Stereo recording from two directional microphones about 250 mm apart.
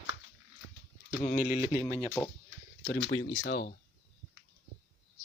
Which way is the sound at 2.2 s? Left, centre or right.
Centre.